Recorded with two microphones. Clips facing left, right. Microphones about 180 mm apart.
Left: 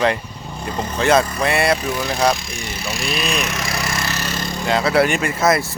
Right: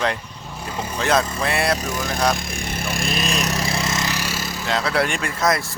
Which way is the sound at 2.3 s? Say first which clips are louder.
Right 1 dB; 55° right (ahead or behind).